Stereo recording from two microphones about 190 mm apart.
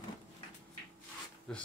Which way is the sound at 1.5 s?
5° left (ahead or behind).